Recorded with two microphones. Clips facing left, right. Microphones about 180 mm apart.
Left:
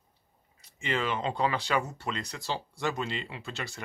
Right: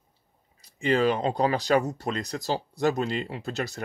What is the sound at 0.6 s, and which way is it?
Speech, 35° right (ahead or behind).